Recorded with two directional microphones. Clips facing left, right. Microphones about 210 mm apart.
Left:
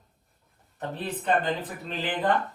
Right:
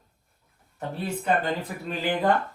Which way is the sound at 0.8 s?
Centre (ahead or behind).